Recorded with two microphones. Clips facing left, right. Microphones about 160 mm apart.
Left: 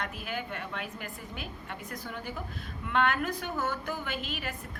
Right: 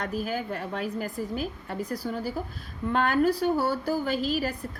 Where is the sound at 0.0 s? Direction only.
40° right (ahead or behind).